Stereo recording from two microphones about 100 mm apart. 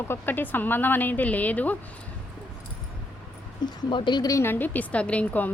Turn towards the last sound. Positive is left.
turn(degrees=15)  # may be behind; listen again after turning